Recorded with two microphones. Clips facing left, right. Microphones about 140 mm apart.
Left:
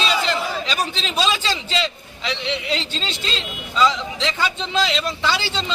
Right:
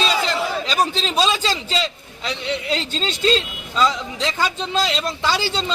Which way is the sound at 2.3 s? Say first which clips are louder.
Right 1 dB; 40° right (ahead or behind).